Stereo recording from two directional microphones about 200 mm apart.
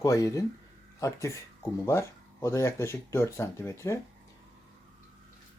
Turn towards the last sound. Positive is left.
turn(degrees=15)  # may be behind; listen again after turning